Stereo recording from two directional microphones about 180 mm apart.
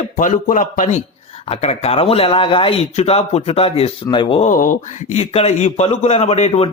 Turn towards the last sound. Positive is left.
turn(degrees=35)  # may be behind; listen again after turning